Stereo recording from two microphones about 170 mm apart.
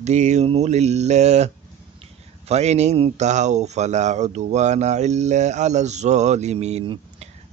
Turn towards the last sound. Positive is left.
turn(degrees=-40)  # may be behind; listen again after turning